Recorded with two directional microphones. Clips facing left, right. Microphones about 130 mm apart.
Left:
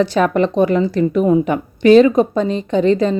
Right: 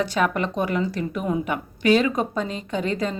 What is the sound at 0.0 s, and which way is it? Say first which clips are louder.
A woman's voice: left 8 dB; 30° left (ahead or behind).